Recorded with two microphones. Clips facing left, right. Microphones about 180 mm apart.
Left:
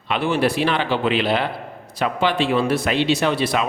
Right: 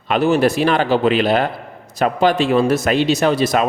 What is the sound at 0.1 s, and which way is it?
A man's voice, 40° right (ahead or behind).